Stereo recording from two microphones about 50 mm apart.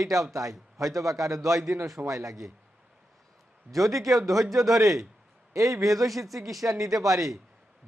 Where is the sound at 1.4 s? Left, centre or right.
Centre.